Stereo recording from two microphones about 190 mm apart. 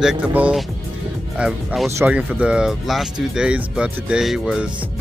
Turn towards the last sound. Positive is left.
turn(degrees=0)  # may be behind; listen again after turning